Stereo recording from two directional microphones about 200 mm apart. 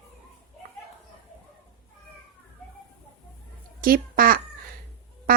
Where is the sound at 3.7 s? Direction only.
45° right (ahead or behind).